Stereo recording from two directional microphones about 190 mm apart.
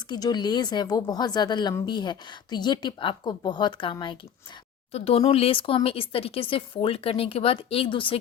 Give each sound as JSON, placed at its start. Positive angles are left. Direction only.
{"t": 0.1, "sound": "a woman's voice", "side_deg": 20}